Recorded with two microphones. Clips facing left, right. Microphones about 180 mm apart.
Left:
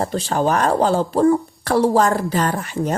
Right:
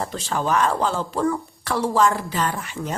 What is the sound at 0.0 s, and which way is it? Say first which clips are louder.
Speech: left 6 dB; 40° left (ahead or behind).